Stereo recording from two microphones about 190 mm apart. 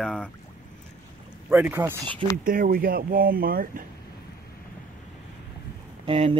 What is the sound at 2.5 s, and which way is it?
Speech, 50° right (ahead or behind).